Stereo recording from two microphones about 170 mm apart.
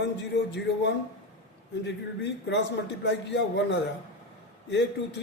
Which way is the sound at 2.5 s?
90° left.